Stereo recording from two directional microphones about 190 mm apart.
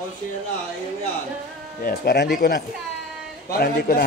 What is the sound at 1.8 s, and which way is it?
A man's voice, 50° left (ahead or behind).